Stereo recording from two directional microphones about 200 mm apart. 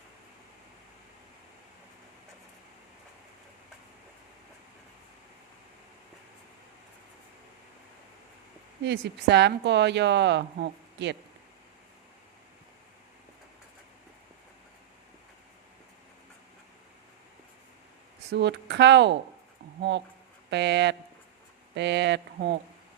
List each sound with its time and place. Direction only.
8.8 s speech: 60° right (ahead or behind)
18.3 s speech: 60° right (ahead or behind)
20.5 s speech: 60° right (ahead or behind)